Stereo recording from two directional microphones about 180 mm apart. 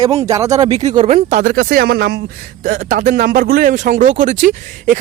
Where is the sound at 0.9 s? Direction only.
35° right (ahead or behind); by 2.2 s 60° right (ahead or behind).